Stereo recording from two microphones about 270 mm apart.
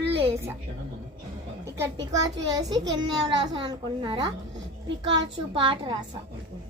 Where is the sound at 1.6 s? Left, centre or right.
Centre.